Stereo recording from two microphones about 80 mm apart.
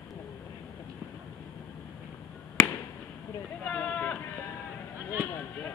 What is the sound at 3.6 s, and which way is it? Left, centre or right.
Sheep, centre.